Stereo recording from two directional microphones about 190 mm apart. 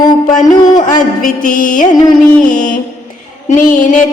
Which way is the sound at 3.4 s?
45° left (ahead or behind).